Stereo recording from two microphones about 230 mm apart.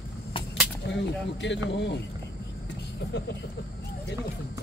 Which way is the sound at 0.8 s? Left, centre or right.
Left.